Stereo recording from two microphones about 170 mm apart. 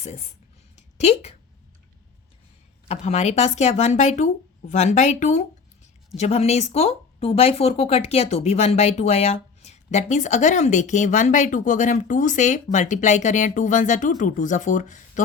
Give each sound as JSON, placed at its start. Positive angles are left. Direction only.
{"t": 2.8, "sound": "speech", "side_deg": 40}